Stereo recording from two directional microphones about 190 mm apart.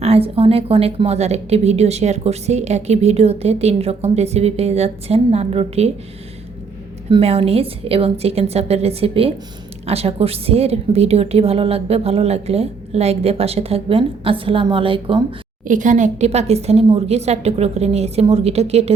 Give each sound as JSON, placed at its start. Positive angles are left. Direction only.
{"t": 0.0, "sound": "a woman's voice", "side_deg": -30}
{"t": 7.1, "sound": "a woman's voice", "side_deg": -30}
{"t": 15.6, "sound": "a woman's voice", "side_deg": -40}